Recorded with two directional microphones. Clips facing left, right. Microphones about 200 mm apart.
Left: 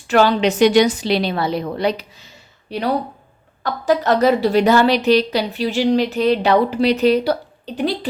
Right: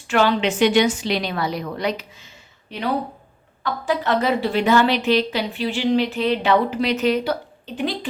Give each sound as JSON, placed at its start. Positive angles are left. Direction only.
{"t": 0.1, "sound": "a woman's voice", "side_deg": 40}